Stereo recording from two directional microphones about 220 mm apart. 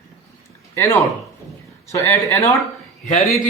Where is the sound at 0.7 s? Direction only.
10° left (ahead or behind).